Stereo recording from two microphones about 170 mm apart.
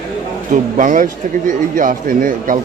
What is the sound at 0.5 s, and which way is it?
A man's voice, 50° right (ahead or behind).